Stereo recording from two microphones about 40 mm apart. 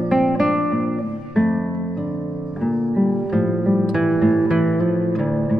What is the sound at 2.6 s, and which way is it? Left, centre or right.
Music, centre.